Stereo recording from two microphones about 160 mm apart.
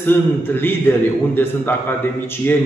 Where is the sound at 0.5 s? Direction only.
10° left (ahead or behind).